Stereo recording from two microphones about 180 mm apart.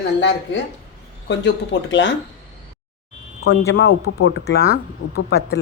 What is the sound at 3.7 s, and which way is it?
Speech, 65° left (ahead or behind).